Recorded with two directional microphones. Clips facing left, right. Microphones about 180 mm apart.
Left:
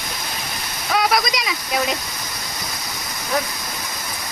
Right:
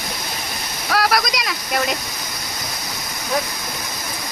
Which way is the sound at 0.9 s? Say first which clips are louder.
Even; centre (ahead or behind).